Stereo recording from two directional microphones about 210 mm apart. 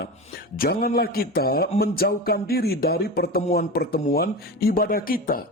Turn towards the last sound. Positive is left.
turn(degrees=45)  # may be behind; listen again after turning